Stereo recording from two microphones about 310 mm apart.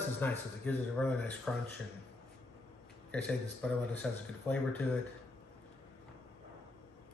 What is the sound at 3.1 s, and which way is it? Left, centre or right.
Speech, centre.